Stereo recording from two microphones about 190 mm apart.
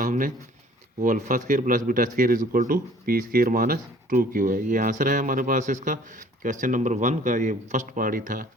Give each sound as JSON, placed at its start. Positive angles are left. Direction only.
{"t": 0.0, "sound": "speech", "side_deg": -45}